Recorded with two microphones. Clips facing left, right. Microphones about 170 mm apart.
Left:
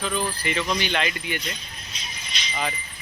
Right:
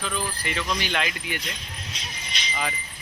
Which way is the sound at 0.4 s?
Centre (ahead or behind).